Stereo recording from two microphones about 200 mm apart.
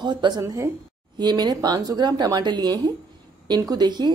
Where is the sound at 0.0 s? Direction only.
20° right (ahead or behind).